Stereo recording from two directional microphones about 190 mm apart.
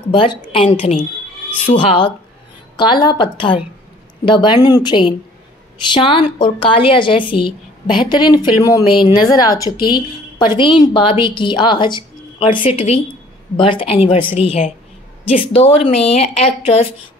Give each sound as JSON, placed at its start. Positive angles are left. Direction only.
{"t": 0.1, "sound": "a woman's voice", "side_deg": 30}